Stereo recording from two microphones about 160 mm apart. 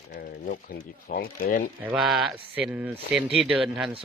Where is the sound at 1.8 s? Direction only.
5° right (ahead or behind).